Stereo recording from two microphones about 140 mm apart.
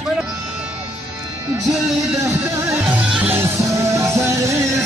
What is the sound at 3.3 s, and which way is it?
Music, 20° right (ahead or behind).